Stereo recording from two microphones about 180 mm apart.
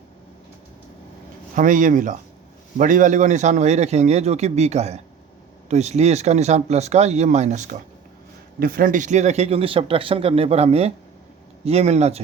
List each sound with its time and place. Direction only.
1.5 s a man's voice: 45° right (ahead or behind)
8.5 s a man's voice: 55° right (ahead or behind); by 12.2 s 35° right (ahead or behind)